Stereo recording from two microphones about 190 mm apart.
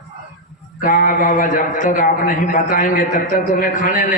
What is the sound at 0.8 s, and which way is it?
A man's voice, 45° left (ahead or behind).